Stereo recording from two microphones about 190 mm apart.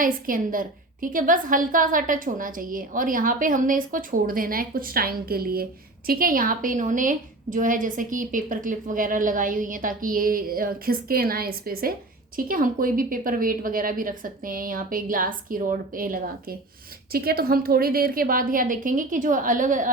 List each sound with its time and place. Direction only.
0.0 s a woman's voice: 45° right (ahead or behind)